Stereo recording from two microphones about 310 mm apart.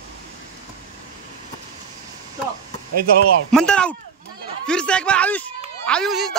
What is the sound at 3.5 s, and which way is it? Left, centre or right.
Speech, centre.